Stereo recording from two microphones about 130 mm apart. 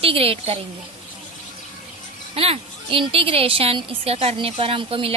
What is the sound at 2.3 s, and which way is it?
Speech, 50° right (ahead or behind).